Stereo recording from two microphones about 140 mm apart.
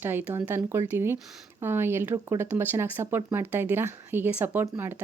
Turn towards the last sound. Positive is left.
turn(degrees=-15)  # may be behind; listen again after turning